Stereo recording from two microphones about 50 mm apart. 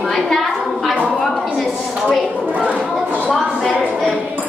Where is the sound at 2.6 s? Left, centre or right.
Right.